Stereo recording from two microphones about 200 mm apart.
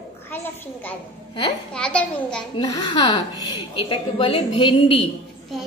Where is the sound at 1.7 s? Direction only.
5° left (ahead or behind).